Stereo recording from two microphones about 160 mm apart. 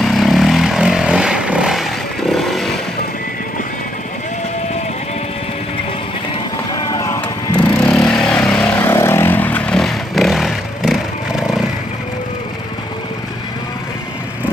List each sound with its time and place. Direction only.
0.0 s vehicle: centre (ahead or behind)
6.7 s vehicle: 25° left (ahead or behind)
7.2 s vehicle: 10° left (ahead or behind)